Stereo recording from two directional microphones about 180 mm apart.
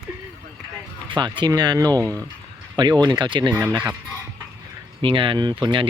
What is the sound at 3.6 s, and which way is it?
Speech, 10° right (ahead or behind).